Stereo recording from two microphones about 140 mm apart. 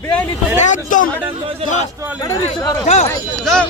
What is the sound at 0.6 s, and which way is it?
Speech, 65° left (ahead or behind).